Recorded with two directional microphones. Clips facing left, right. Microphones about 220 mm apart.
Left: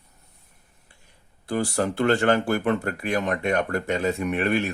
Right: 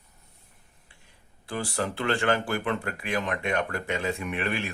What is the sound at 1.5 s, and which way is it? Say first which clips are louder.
Speech: left 6 dB; 40° left (ahead or behind).